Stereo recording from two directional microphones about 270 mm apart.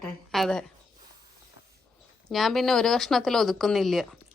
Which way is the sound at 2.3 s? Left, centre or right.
Centre.